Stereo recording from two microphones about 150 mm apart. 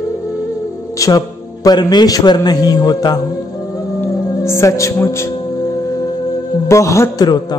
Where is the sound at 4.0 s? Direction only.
20° left (ahead or behind).